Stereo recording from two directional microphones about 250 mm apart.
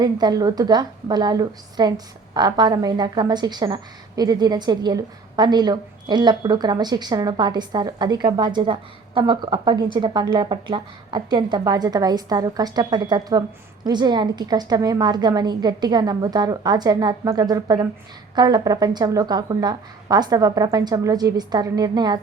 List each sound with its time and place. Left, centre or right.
0.0 s a woman's voice: centre